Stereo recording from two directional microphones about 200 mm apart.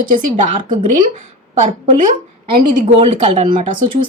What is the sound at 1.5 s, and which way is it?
A woman's voice, 40° right (ahead or behind).